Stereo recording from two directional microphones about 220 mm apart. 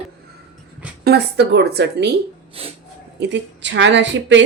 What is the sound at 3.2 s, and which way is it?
A woman's voice, 55° right (ahead or behind).